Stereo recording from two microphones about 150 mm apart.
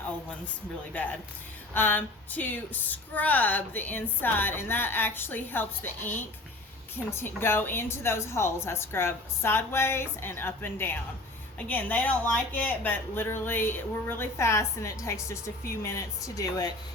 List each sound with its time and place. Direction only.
1.7 s speech: 15° left (ahead or behind)
7.2 s speech: 15° left (ahead or behind)